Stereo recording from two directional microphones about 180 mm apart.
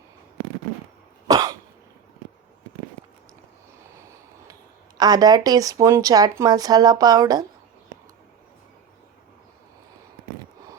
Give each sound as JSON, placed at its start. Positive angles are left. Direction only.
{"t": 1.3, "sound": "cough", "side_deg": -20}
{"t": 4.9, "sound": "speech", "side_deg": -20}